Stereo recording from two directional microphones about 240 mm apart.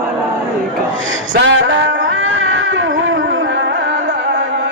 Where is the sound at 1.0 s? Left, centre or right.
Right.